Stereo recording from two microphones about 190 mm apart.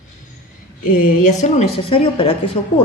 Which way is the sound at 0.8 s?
45° left (ahead or behind).